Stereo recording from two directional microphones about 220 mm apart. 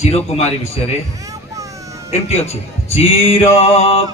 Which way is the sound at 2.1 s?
30° left (ahead or behind).